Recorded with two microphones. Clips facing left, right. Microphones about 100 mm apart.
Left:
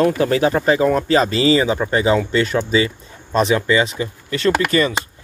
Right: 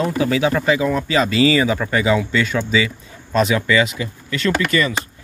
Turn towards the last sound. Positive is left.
turn(degrees=35)  # may be behind; listen again after turning